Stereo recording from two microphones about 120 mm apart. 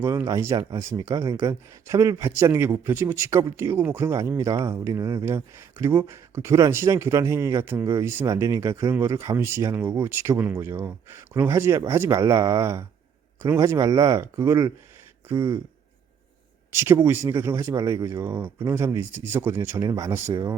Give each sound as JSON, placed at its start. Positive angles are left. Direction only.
{"t": 0.0, "sound": "speech", "side_deg": -25}
{"t": 16.7, "sound": "speech", "side_deg": -20}